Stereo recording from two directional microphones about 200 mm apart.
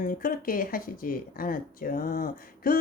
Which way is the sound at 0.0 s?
45° left (ahead or behind).